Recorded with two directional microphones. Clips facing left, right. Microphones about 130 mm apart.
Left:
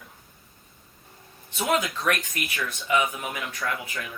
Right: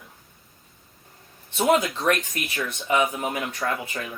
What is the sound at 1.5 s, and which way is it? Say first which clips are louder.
Speech: right 5 dB; 25° right (ahead or behind).